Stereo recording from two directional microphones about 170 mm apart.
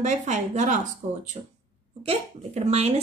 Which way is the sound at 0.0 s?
45° right (ahead or behind).